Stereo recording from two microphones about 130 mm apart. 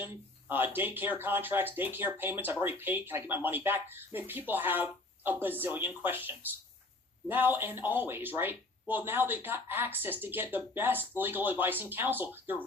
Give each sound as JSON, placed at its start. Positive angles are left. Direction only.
{"t": 0.0, "sound": "speech", "side_deg": -15}